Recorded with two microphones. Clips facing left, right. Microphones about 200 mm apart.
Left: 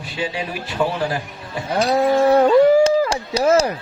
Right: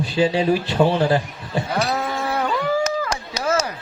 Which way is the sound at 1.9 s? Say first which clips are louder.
Left 10 dB; 35° left (ahead or behind).